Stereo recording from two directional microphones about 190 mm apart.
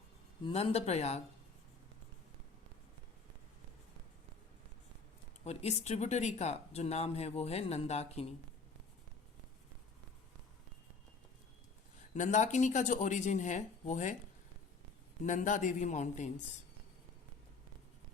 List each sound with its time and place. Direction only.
0.4 s speech: 30° left (ahead or behind)
5.5 s speech: 35° left (ahead or behind)
12.1 s speech: 40° left (ahead or behind)
15.2 s speech: 40° left (ahead or behind)